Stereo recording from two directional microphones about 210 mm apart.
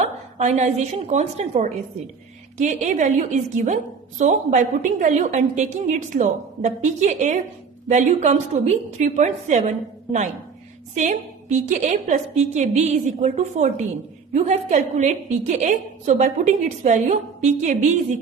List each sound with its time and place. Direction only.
0.0 s a woman's voice: 35° right (ahead or behind)